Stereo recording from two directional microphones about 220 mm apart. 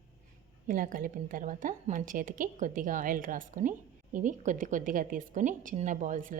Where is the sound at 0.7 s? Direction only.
40° right (ahead or behind).